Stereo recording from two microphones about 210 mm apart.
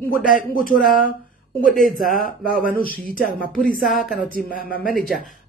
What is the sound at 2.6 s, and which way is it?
Speech, 40° left (ahead or behind).